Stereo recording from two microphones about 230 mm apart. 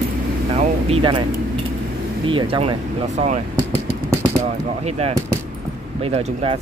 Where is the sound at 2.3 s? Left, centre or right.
Right.